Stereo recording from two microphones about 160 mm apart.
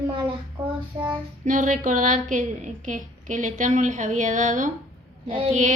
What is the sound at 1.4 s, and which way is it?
A woman's voice, 50° right (ahead or behind).